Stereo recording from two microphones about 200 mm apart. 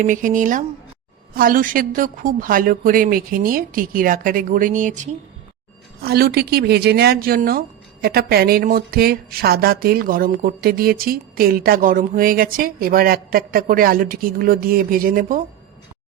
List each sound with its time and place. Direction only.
0.0 s speech: 40° right (ahead or behind)
6.0 s speech: 50° right (ahead or behind)